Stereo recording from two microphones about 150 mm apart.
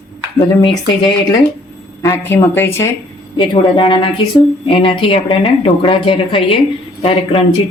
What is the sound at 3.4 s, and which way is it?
Speech, 35° left (ahead or behind).